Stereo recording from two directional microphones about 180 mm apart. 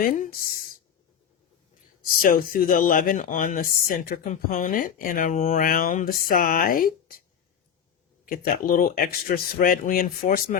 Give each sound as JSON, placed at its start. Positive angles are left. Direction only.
{"t": 0.0, "sound": "speech", "side_deg": 50}
{"t": 2.2, "sound": "speech", "side_deg": 50}
{"t": 8.2, "sound": "speech", "side_deg": 50}